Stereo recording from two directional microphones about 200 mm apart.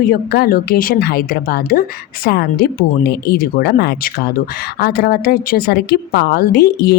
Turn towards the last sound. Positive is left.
turn(degrees=55)  # may be behind; listen again after turning